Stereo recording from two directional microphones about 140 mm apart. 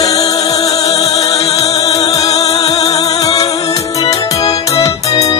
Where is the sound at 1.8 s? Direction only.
25° left (ahead or behind).